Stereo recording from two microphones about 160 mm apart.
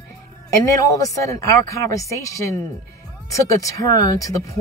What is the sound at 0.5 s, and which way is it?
Speech, 20° left (ahead or behind).